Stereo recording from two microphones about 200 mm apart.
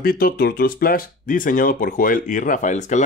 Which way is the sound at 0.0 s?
45° left (ahead or behind).